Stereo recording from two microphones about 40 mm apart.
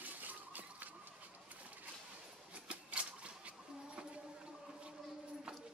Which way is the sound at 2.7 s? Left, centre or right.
Right.